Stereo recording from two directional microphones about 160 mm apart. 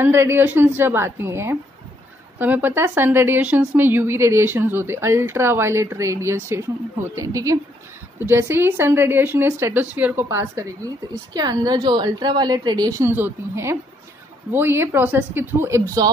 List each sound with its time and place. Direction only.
0.0 s a woman's voice: 15° right (ahead or behind)